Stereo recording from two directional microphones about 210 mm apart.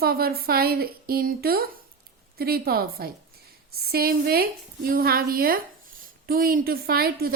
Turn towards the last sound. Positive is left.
turn(degrees=-45)  # may be behind; listen again after turning